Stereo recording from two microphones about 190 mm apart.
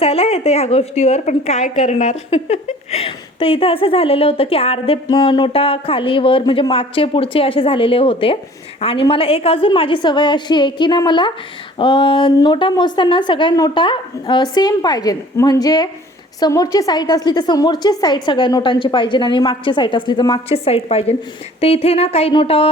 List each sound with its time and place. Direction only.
0.0 s a woman's voice: 30° left (ahead or behind)